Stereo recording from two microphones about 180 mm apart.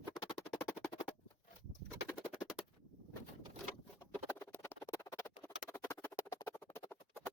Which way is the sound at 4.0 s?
10° left (ahead or behind).